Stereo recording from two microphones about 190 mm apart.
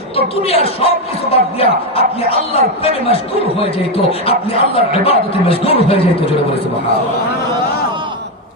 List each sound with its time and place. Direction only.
0.2 s speech: 30° left (ahead or behind)